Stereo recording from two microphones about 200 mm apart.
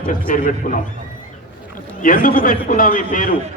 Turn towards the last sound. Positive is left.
turn(degrees=40)  # may be behind; listen again after turning